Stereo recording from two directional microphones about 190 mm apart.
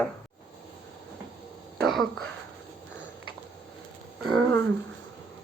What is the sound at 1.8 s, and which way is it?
Speech, centre (ahead or behind).